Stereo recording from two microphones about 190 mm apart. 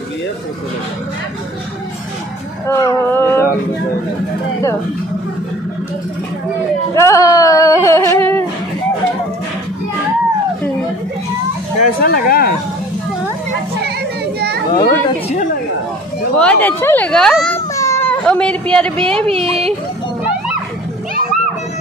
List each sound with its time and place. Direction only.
2.6 s speech: 15° left (ahead or behind)
7.0 s a sound: 15° left (ahead or behind)
12.0 s speech: 50° left (ahead or behind)
14.7 s a child's voice: 25° left (ahead or behind)
16.3 s speech: 10° left (ahead or behind)
17.7 s a sound: 15° left (ahead or behind)
19.1 s speech: 30° right (ahead or behind)